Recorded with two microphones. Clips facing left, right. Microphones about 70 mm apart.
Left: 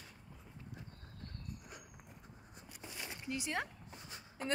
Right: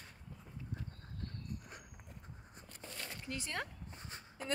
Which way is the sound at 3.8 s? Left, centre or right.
Right.